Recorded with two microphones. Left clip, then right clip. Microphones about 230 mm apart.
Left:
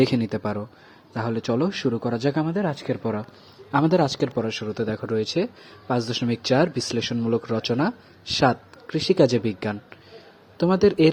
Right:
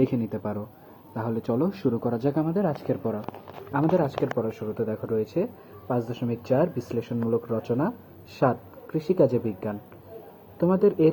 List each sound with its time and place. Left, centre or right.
0.0 s speech: left
3.7 s speech: left
4.2 s speech: left